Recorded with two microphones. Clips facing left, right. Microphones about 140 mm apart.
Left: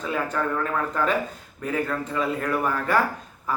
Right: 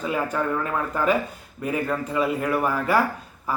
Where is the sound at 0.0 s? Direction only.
10° right (ahead or behind).